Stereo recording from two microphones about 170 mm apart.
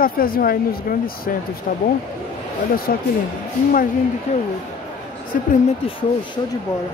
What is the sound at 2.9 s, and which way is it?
Speech, 55° left (ahead or behind).